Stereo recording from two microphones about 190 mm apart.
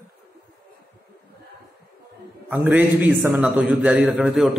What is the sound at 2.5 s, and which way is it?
A man's voice, 10° right (ahead or behind).